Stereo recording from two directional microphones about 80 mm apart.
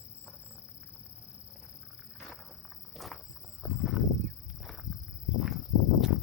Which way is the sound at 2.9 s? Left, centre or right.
Centre.